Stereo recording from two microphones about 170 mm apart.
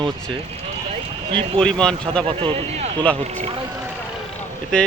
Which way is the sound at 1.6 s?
5° left (ahead or behind).